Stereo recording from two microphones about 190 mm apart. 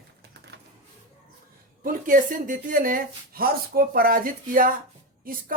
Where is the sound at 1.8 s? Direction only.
45° right (ahead or behind).